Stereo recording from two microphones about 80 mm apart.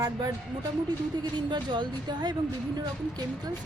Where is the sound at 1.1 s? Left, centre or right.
Right.